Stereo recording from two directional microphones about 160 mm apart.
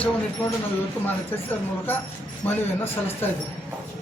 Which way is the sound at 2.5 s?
15° left (ahead or behind).